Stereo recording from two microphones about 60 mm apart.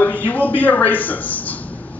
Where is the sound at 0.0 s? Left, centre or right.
Left.